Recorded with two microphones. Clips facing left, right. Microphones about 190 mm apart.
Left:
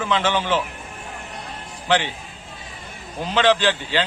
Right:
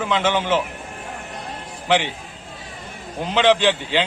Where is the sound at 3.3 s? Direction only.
15° right (ahead or behind).